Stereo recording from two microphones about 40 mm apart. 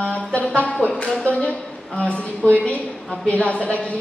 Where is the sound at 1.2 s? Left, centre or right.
Left.